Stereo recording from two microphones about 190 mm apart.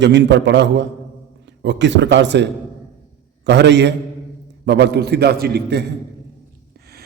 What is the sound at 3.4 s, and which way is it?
Mantra, 65° right (ahead or behind).